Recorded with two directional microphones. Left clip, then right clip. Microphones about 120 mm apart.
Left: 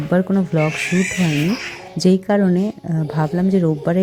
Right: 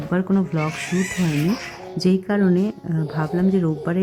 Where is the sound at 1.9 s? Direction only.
25° left (ahead or behind).